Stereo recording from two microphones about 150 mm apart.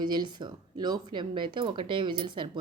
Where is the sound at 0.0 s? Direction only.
30° right (ahead or behind).